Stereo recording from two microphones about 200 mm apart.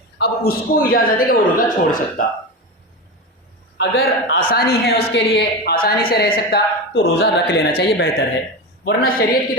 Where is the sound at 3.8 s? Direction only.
50° left (ahead or behind).